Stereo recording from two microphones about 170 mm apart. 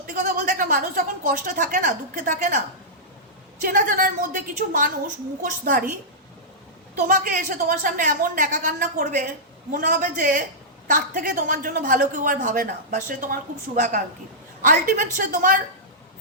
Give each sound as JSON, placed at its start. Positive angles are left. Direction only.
{"t": 0.1, "sound": "a woman's voice", "side_deg": -50}
{"t": 3.6, "sound": "a woman's voice", "side_deg": -50}
{"t": 7.1, "sound": "a woman's voice", "side_deg": -50}